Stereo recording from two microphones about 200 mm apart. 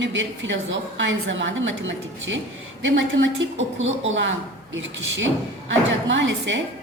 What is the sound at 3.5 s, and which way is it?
A woman's voice, 75° right (ahead or behind).